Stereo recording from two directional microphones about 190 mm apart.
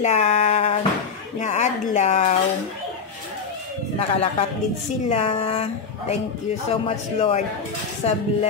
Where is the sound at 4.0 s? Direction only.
30° left (ahead or behind).